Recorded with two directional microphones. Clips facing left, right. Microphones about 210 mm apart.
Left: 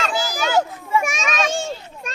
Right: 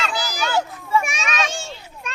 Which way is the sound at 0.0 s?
45° left (ahead or behind).